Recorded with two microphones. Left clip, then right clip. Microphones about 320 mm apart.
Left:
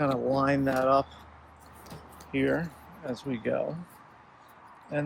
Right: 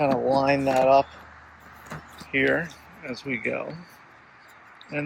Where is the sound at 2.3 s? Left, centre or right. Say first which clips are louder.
Right 6 dB; centre.